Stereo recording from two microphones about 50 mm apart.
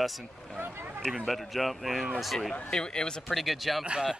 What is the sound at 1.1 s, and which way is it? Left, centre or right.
Speech, centre.